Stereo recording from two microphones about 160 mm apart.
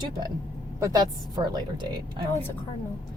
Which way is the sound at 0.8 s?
25° right (ahead or behind).